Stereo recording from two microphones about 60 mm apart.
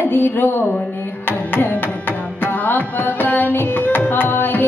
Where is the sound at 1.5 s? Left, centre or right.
Left.